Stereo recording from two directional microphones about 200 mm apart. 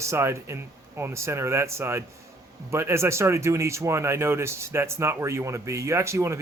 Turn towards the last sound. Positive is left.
turn(degrees=-15)  # may be behind; listen again after turning